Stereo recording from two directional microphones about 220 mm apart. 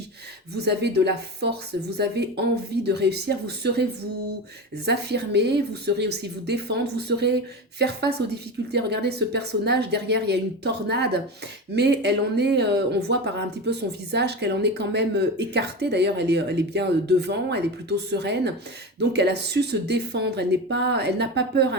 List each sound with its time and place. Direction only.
0.5 s speech: 50° right (ahead or behind)
4.9 s speech: 50° right (ahead or behind)